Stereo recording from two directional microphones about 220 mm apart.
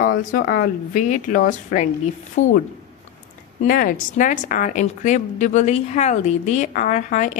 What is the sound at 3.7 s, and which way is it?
Speech, 40° left (ahead or behind).